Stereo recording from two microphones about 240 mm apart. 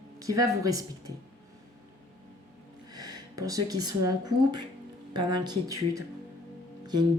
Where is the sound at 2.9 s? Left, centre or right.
Centre.